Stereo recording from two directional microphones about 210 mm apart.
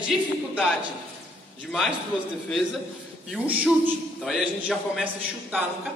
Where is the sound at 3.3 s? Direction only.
5° right (ahead or behind).